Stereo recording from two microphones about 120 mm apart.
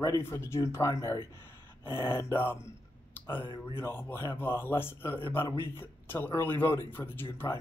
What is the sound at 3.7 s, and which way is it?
Speech, 20° left (ahead or behind).